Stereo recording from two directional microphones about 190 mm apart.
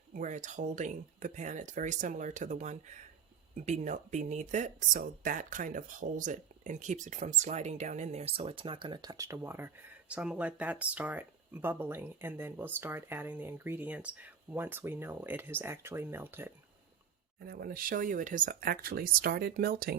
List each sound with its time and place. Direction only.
0.1 s speech: 40° right (ahead or behind); by 16.5 s 10° right (ahead or behind)
17.4 s speech: 55° right (ahead or behind)